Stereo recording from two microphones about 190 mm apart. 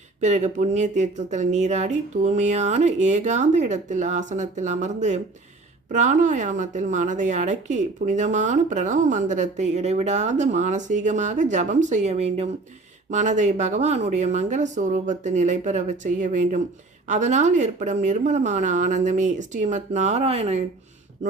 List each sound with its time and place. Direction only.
0.2 s a woman's voice: 40° right (ahead or behind)